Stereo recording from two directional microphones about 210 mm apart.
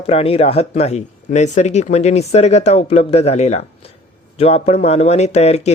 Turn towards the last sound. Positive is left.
turn(degrees=30)  # may be behind; listen again after turning